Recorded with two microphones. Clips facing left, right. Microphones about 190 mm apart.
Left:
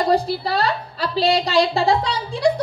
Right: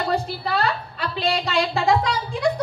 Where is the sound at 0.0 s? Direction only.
35° left (ahead or behind).